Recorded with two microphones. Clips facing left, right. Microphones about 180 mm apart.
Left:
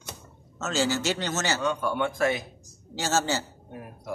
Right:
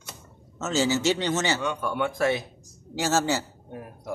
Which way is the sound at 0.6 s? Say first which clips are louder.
Right 2 dB; 20° right (ahead or behind).